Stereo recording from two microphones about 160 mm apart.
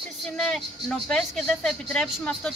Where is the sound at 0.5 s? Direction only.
5° left (ahead or behind).